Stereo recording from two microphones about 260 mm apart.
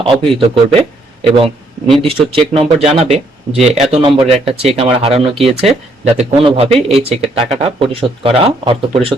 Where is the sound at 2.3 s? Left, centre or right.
Right.